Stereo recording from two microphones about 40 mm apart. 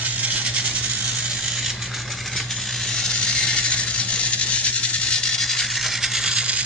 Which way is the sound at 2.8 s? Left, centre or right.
Centre.